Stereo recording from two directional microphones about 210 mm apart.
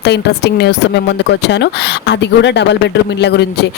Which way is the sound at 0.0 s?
50° left (ahead or behind).